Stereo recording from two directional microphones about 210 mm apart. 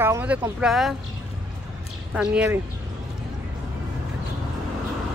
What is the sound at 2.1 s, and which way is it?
Speech, 5° right (ahead or behind).